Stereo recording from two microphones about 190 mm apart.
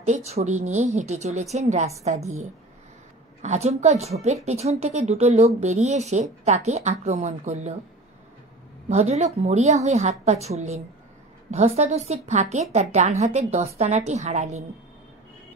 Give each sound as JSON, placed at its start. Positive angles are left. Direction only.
{"t": 0.0, "sound": "a woman's voice", "side_deg": -35}
{"t": 3.4, "sound": "a woman's voice", "side_deg": -35}
{"t": 8.8, "sound": "a woman's voice", "side_deg": -35}